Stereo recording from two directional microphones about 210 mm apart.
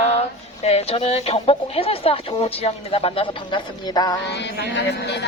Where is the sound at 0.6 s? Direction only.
30° left (ahead or behind).